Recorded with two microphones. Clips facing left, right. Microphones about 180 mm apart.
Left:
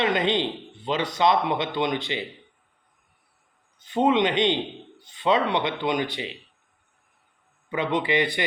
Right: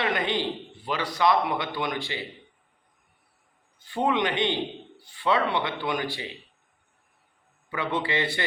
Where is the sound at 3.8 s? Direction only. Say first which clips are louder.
Left 4 dB; 20° left (ahead or behind).